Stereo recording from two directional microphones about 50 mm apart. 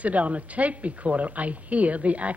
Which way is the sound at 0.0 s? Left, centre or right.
Right.